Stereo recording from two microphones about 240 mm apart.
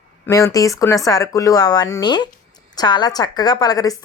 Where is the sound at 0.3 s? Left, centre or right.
Centre.